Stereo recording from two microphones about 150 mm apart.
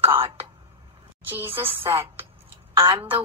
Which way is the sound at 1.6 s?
35° right (ahead or behind).